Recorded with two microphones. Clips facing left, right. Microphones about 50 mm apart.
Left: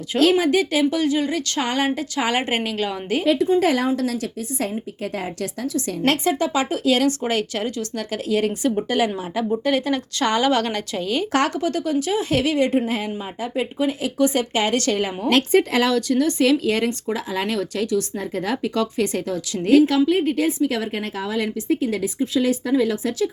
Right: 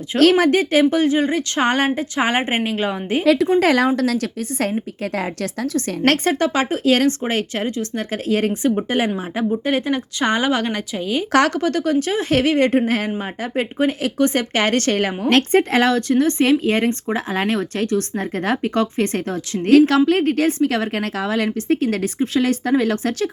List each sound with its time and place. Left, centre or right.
0.2 s a woman's voice: right
0.6 s speech: right
1.6 s speech: right
3.2 s a woman's voice: right; by 11.3 s centre
11.3 s speech: right
11.6 s speech: right
19.6 s a woman's voice: right